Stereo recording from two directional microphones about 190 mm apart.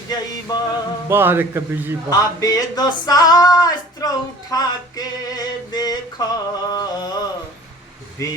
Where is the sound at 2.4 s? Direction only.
20° left (ahead or behind).